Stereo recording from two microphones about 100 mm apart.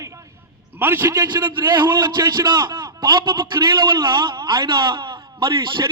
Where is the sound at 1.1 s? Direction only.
45° right (ahead or behind).